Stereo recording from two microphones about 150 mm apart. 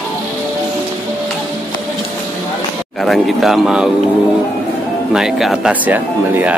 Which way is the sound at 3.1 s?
Centre (ahead or behind).